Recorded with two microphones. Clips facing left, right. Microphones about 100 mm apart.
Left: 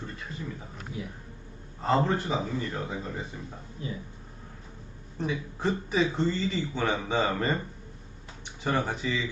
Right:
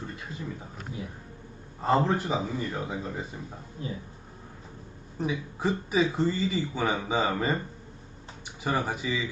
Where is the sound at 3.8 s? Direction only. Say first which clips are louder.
Right 1 dB; 35° right (ahead or behind).